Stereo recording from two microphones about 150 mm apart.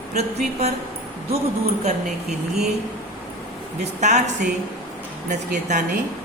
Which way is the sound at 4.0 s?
50° right (ahead or behind).